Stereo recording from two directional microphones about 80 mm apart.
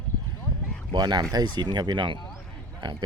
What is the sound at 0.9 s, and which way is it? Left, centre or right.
Speech, right.